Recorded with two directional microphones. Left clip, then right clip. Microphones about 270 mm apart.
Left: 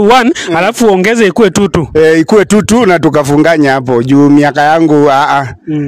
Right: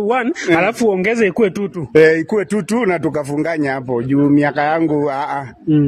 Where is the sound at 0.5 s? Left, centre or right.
Left.